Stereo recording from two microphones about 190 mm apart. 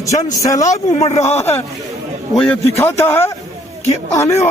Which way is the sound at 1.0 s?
35° left (ahead or behind).